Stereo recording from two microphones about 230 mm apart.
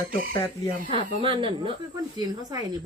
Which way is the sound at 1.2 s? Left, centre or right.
Right.